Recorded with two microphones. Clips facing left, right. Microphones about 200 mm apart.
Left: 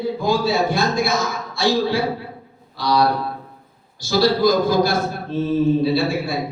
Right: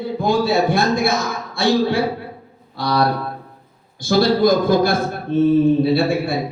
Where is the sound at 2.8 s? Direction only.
55° right (ahead or behind).